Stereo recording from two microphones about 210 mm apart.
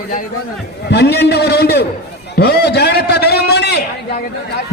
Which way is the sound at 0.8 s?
50° left (ahead or behind).